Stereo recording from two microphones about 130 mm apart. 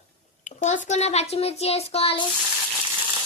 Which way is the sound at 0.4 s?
65° left (ahead or behind).